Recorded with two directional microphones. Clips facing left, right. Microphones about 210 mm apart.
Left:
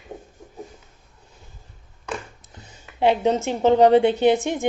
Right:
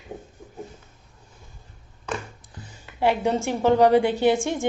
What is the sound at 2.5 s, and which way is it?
A woman's voice, 20° left (ahead or behind).